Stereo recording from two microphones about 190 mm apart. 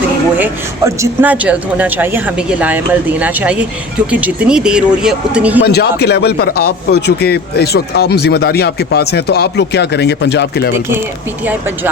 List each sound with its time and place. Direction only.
0.3 s speech: 10° right (ahead or behind)
5.6 s a man's voice: 55° left (ahead or behind)